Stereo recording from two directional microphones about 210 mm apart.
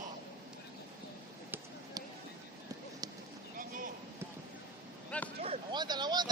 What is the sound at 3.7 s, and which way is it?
Basketball bounce, 40° right (ahead or behind).